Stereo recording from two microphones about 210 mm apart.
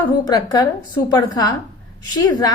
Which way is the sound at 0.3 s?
20° left (ahead or behind).